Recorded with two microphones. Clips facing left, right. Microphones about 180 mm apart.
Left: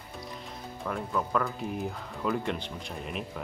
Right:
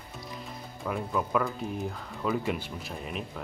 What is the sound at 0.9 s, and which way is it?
Speech, 5° right (ahead or behind).